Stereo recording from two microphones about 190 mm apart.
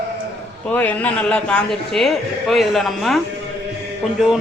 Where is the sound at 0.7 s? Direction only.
10° left (ahead or behind).